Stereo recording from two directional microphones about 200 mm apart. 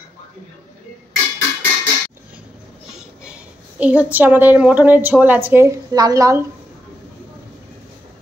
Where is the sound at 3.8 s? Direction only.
5° right (ahead or behind).